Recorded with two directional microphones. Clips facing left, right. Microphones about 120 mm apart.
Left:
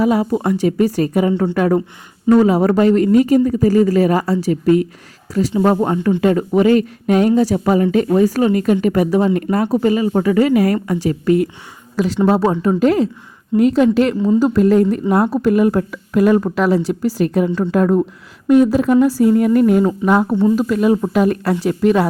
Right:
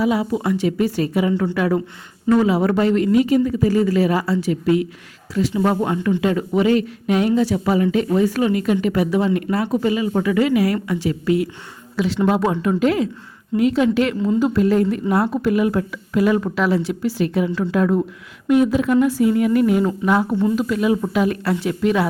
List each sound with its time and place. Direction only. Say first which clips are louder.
0.0 s speech: left 4 dB; 45° left (ahead or behind)